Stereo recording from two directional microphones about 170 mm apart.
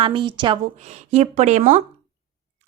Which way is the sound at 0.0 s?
30° right (ahead or behind).